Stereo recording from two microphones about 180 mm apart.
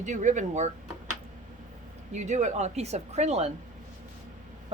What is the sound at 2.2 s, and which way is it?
Speech, 40° right (ahead or behind).